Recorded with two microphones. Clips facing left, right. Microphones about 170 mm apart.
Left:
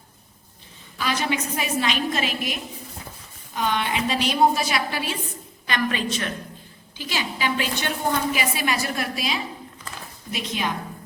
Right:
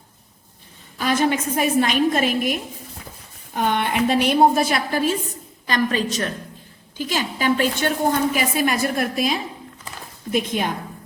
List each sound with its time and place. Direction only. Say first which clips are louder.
0.9 s a woman's voice: right 5 dB; 50° right (ahead or behind)